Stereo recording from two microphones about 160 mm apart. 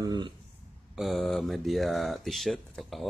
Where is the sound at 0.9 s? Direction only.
Centre (ahead or behind).